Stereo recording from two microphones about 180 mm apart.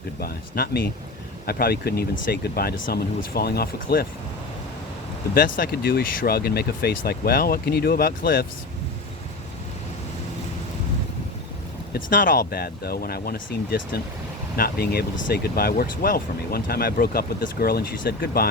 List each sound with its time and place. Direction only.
0.2 s speech: 60° left (ahead or behind)
5.3 s speech: 55° left (ahead or behind)
12.1 s speech: 50° left (ahead or behind)